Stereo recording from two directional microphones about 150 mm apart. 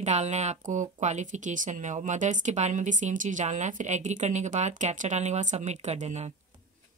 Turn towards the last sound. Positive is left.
turn(degrees=-50)  # may be behind; listen again after turning